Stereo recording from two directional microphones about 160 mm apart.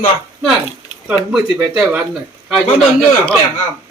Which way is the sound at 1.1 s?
5° right (ahead or behind).